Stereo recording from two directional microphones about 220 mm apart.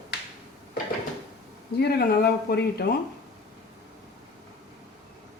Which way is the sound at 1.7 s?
45° left (ahead or behind).